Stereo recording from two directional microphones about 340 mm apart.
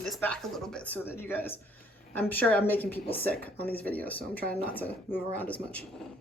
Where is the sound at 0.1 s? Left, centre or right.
Centre.